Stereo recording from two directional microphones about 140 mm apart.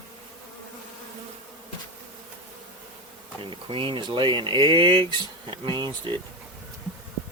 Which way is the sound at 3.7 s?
35° right (ahead or behind).